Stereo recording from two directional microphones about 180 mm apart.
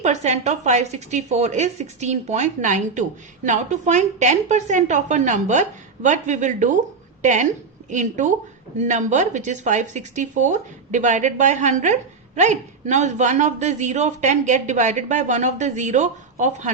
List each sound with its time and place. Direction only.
0.0 s a woman's voice: 40° right (ahead or behind)